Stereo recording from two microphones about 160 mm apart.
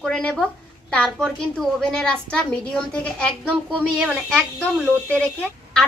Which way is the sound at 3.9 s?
5° right (ahead or behind).